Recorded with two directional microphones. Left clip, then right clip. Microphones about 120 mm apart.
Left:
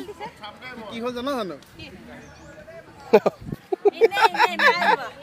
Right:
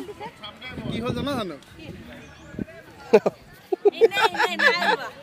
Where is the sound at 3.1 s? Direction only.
5° left (ahead or behind).